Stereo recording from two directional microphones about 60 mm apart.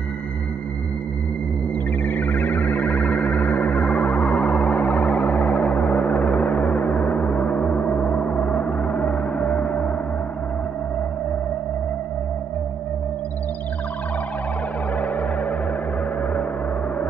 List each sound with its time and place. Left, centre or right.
2.0 s music: left
3.7 s music: centre
4.6 s music: left
5.0 s music: centre
5.6 s a sound: left
6.4 s gong: left
15.0 s music: left